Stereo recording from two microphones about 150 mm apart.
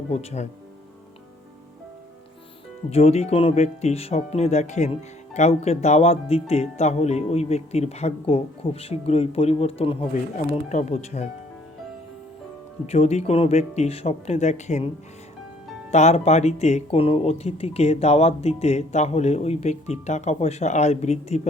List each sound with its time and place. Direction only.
0.1 s speech: 45° left (ahead or behind)
2.9 s speech: 45° left (ahead or behind)
10.5 s speech: 50° left (ahead or behind)
12.8 s speech: 45° left (ahead or behind)
15.9 s speech: 50° left (ahead or behind)